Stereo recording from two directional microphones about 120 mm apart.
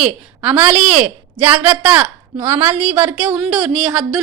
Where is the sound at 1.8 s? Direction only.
10° right (ahead or behind).